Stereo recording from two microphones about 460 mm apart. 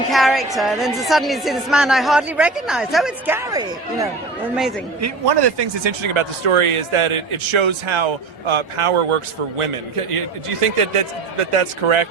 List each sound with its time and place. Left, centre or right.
0.1 s a woman's voice: centre
5.2 s speech: right
10.8 s speech: right